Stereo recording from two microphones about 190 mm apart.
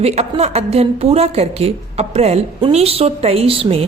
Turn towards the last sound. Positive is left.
turn(degrees=-30)  # may be behind; listen again after turning